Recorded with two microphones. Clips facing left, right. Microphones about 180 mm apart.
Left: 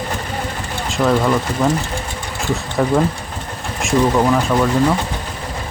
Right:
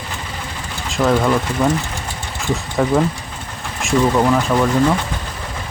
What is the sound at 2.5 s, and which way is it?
Speech, centre (ahead or behind).